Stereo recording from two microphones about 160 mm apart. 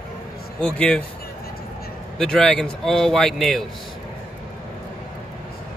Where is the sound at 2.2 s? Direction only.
5° left (ahead or behind).